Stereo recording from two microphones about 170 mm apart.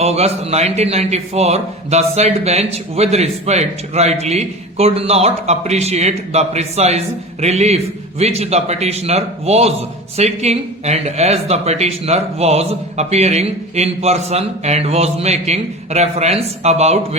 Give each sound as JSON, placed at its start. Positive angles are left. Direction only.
{"t": 0.0, "sound": "speech", "side_deg": -40}